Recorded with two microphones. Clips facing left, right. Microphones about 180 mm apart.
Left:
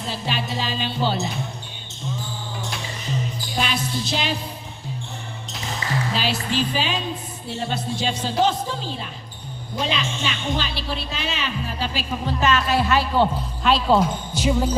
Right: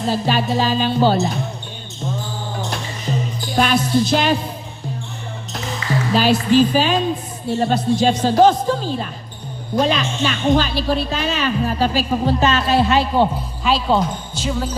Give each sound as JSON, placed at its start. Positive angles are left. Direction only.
{"t": 0.0, "sound": "a woman's voice", "side_deg": -45}
{"t": 3.5, "sound": "a woman's voice", "side_deg": -50}
{"t": 6.1, "sound": "a woman's voice", "side_deg": -45}
{"t": 13.7, "sound": "speech", "side_deg": 0}
{"t": 14.3, "sound": "music", "side_deg": 15}